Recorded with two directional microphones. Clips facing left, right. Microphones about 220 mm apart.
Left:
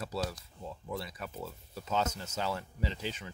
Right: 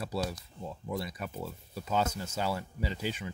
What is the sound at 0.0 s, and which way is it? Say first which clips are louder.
Speech: right 2 dB; 15° right (ahead or behind).